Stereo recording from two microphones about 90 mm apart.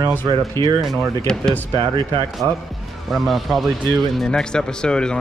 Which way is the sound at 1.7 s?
65° right (ahead or behind).